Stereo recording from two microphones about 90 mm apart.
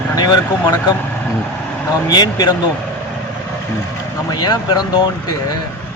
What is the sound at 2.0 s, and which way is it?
Speech, 45° left (ahead or behind).